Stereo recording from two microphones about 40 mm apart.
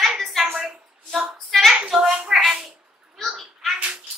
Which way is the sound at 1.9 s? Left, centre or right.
Centre.